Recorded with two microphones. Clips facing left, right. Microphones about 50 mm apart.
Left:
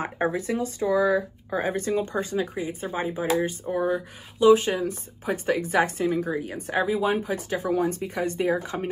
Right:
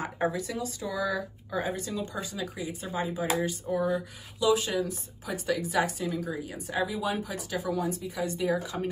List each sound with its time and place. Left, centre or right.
0.0 s speech: left